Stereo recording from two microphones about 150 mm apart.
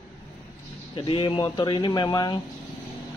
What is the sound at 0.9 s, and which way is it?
Speech, 35° left (ahead or behind).